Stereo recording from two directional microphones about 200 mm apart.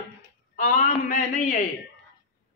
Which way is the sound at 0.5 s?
40° left (ahead or behind).